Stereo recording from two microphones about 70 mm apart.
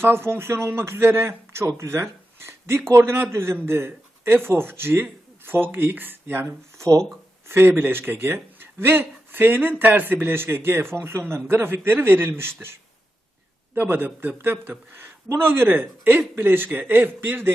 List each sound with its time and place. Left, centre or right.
0.0 s a man's voice: right
6.7 s a sound: right
7.4 s speech: right
13.7 s speech: right